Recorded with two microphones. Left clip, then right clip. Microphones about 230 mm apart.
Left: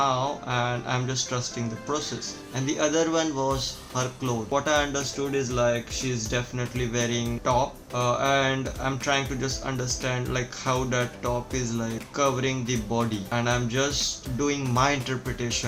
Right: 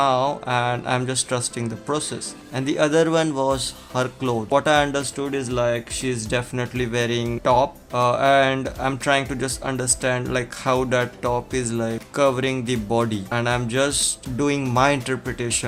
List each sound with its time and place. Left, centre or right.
0.0 s speech: right